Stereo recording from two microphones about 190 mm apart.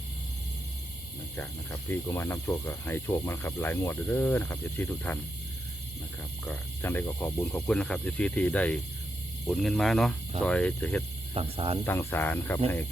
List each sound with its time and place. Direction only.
1.9 s speech: 15° left (ahead or behind)
6.4 s speech: 10° left (ahead or behind)
11.3 s speech: 30° right (ahead or behind)
11.9 s speech: 10° left (ahead or behind)